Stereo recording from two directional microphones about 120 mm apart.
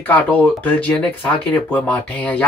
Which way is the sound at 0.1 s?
15° left (ahead or behind).